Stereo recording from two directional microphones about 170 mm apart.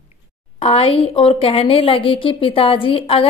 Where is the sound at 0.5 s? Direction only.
35° left (ahead or behind).